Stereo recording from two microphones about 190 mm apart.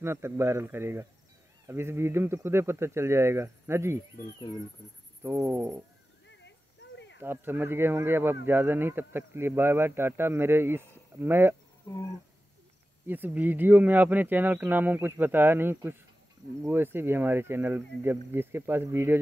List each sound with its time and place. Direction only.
0.0 s speech: 15° right (ahead or behind)
5.2 s speech: 10° right (ahead or behind)
6.2 s a sound: 70° left (ahead or behind)
7.2 s speech: 10° right (ahead or behind)
13.0 s speech: 10° right (ahead or behind)